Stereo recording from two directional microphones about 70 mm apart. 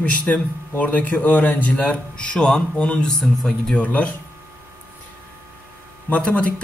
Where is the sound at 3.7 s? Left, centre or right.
Left.